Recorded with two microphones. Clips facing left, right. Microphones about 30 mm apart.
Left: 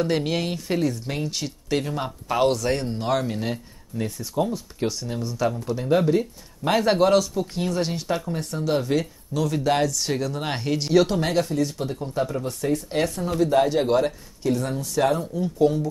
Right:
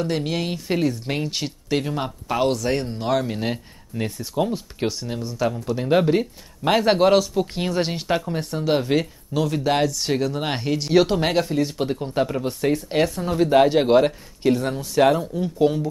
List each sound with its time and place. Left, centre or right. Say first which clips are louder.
0.0 s a woman's voice: left 1 dB; centre
3.9 s speech: right 1 dB; right
5.3 s speech: right 1 dB; centre
5.8 s speech: right 2 dB; right
6.7 s speech: right 2 dB; centre
11.8 s speech: right 4 dB; right; by 13.1 s centre
13.3 s speech: right 4 dB; right
15.3 s speech: right 1 dB; right